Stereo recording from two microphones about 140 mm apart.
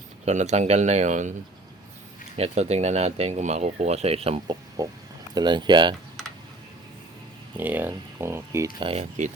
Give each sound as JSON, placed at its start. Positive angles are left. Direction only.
{"t": 0.3, "sound": "speech", "side_deg": -55}
{"t": 2.4, "sound": "speech", "side_deg": -50}
{"t": 4.8, "sound": "speech", "side_deg": -25}
{"t": 7.5, "sound": "speech", "side_deg": -15}
{"t": 8.8, "sound": "speech", "side_deg": -40}